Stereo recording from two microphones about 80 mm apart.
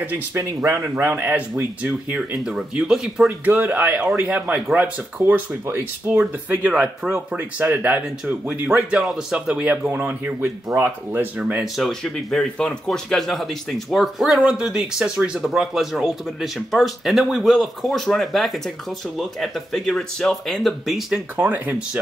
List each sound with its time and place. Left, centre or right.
0.0 s speech: right
0.4 s speech: right; by 2.1 s centre
2.1 s speech: centre
3.4 s speech: right
9.8 s speech: right
11.6 s speech: centre
21.4 s speech: right